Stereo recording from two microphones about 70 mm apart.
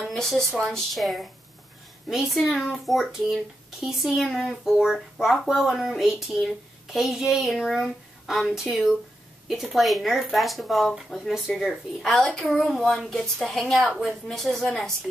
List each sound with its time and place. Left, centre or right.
0.0 s speech: centre